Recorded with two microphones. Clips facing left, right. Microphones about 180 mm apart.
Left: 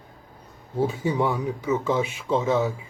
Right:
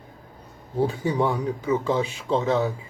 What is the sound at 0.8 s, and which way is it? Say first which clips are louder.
Speech: even; 15° left (ahead or behind).